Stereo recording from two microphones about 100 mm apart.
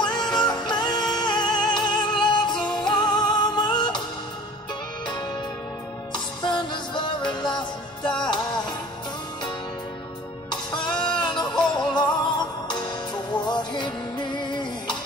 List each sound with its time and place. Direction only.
0.0 s music: 45° left (ahead or behind)
5.0 s music: 50° left (ahead or behind)
10.5 s music: 50° left (ahead or behind)